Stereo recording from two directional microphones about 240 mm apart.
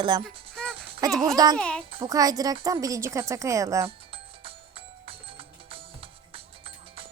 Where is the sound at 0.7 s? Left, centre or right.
Centre.